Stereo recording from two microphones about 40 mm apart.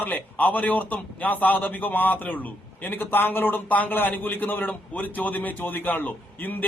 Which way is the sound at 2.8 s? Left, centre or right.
Left.